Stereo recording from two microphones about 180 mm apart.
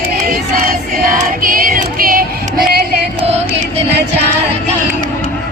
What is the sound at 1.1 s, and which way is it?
Female singing, 50° right (ahead or behind).